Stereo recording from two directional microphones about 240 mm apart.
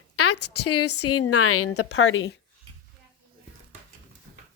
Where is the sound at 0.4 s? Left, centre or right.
Left.